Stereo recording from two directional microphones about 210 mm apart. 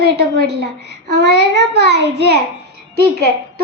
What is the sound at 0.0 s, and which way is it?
A child's voice, 50° right (ahead or behind).